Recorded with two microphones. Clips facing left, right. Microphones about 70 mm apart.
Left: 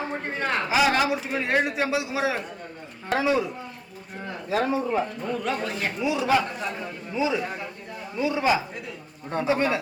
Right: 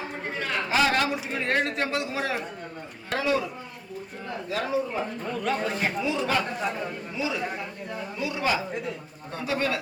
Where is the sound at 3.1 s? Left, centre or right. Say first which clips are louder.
Left 3 dB; centre.